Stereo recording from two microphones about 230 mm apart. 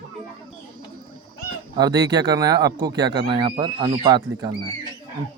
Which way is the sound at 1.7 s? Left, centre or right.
Centre.